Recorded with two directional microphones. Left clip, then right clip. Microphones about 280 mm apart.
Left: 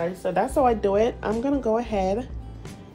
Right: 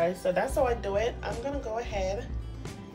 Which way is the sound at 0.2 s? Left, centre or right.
Centre.